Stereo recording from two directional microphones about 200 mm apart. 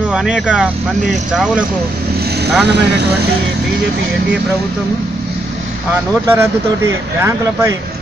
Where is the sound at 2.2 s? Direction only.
55° right (ahead or behind).